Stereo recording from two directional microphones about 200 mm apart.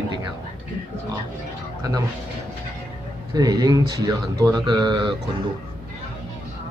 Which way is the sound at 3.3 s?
20° right (ahead or behind).